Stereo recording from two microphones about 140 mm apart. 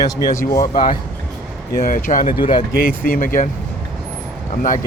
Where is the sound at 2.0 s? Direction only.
70° left (ahead or behind).